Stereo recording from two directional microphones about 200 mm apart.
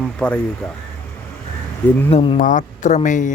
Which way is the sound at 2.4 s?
40° left (ahead or behind).